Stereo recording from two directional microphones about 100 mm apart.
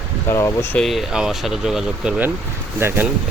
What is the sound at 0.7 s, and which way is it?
Speech, centre (ahead or behind).